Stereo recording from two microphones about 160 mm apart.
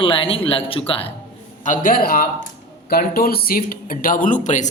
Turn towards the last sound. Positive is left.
turn(degrees=50)  # may be behind; listen again after turning